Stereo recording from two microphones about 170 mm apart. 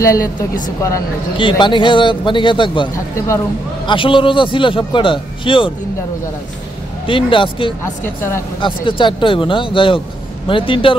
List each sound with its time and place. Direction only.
0.0 s a man's voice: 20° left (ahead or behind)
1.4 s a man's voice: 30° left (ahead or behind)
7.1 s speech: 30° left (ahead or behind)
7.8 s speech: 15° left (ahead or behind)
8.5 s speech: 30° left (ahead or behind)